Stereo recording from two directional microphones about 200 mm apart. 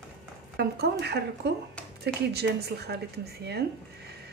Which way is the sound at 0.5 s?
55° right (ahead or behind).